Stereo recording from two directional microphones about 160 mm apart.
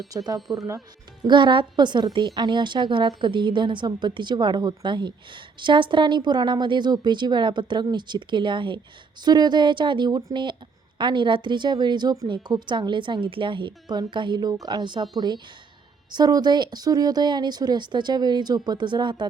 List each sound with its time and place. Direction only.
0.3 s speech: centre (ahead or behind)
1.2 s a woman's voice: 30° right (ahead or behind)